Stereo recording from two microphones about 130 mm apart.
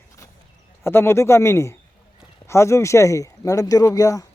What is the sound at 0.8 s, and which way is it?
Speech, 20° left (ahead or behind).